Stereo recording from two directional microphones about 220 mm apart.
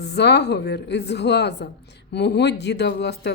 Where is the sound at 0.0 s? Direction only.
50° left (ahead or behind).